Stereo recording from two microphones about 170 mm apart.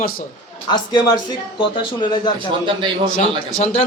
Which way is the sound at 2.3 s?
30° right (ahead or behind).